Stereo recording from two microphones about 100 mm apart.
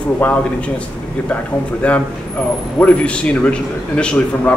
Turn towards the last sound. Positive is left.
turn(degrees=10)  # may be behind; listen again after turning